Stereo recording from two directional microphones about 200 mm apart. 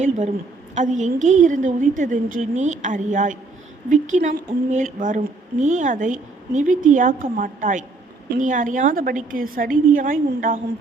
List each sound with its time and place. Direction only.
0.8 s a woman's voice: 35° right (ahead or behind)